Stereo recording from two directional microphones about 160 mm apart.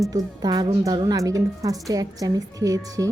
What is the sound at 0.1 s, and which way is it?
A woman's voice, 25° right (ahead or behind).